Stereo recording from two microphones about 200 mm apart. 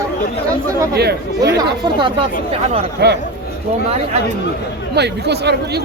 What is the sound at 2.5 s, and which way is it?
Speech, 30° right (ahead or behind).